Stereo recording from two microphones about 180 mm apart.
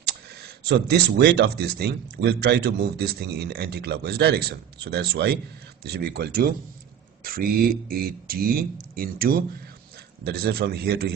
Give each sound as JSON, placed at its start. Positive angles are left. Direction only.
{"t": 0.6, "sound": "speech", "side_deg": -65}